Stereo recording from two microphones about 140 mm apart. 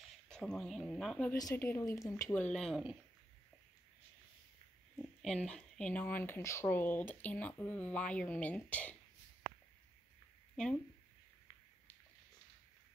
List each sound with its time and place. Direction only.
0.0 s speech: 5° left (ahead or behind)
1.3 s a woman's voice: 20° left (ahead or behind)
2.5 s speech: centre (ahead or behind)
5.2 s speech: 5° left (ahead or behind)
10.5 s a sound: 5° left (ahead or behind)